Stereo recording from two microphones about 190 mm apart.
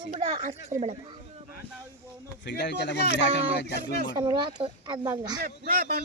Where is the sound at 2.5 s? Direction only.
65° left (ahead or behind).